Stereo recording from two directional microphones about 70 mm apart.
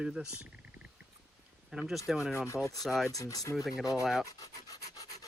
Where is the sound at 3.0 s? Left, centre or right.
Left.